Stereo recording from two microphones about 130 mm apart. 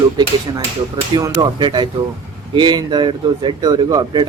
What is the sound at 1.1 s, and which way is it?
Speech, 35° right (ahead or behind).